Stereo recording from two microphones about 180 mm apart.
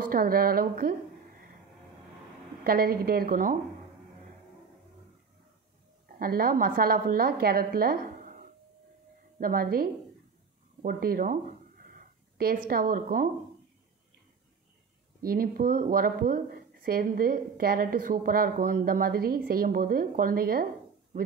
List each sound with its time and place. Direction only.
0.1 s a woman's voice: 55° right (ahead or behind)
2.6 s a woman's voice: 55° right (ahead or behind)
6.1 s a woman's voice: 55° right (ahead or behind)
15.2 s a woman's voice: 55° right (ahead or behind)